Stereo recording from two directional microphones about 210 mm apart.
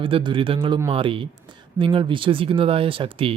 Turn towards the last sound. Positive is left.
turn(degrees=-25)  # may be behind; listen again after turning